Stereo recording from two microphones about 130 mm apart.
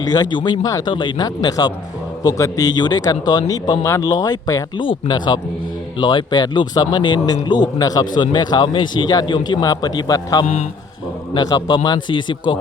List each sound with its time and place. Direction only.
0.0 s speech: 30° left (ahead or behind)
10.4 s a man's voice: 65° left (ahead or behind)
11.3 s speech: 35° left (ahead or behind)